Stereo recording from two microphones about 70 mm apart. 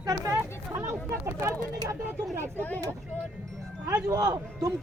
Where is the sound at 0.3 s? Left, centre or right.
Right.